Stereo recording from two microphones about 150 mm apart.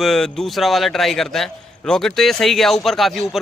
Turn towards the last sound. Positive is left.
turn(degrees=0)  # may be behind; listen again after turning